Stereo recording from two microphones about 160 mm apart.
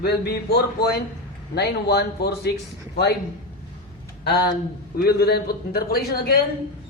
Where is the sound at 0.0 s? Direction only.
90° left.